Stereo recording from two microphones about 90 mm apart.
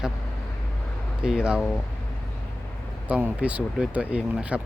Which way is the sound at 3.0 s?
15° right (ahead or behind).